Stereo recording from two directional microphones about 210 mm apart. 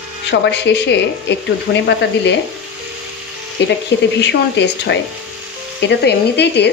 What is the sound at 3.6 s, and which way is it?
Speech, 55° left (ahead or behind).